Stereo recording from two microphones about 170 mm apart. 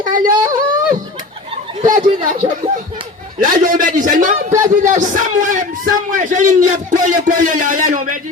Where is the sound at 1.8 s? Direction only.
50° right (ahead or behind).